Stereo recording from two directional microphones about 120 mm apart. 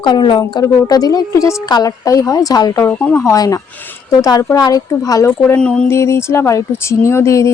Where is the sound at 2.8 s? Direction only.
15° left (ahead or behind).